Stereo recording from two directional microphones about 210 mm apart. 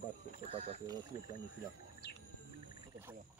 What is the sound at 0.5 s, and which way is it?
Speech, 30° right (ahead or behind).